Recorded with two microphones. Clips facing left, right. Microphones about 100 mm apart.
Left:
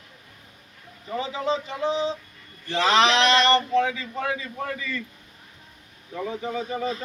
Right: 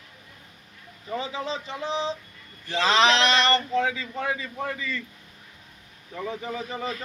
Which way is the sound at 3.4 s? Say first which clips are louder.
Left 3 dB; 20° left (ahead or behind).